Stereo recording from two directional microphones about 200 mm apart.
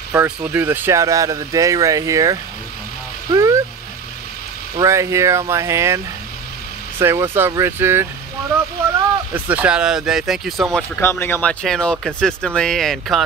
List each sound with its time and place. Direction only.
0.1 s speech: 10° right (ahead or behind)
3.3 s a sound: 15° right (ahead or behind)
4.7 s speech: 15° right (ahead or behind)
7.0 s speech: 10° right (ahead or behind)